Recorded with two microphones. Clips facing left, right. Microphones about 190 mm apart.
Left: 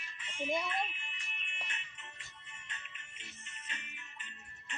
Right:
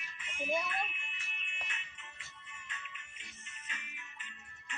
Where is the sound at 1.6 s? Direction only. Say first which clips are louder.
Left 1 dB; 30° left (ahead or behind).